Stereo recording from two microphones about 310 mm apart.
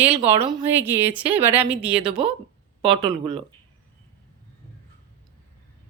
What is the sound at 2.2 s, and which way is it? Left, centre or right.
Speech, centre.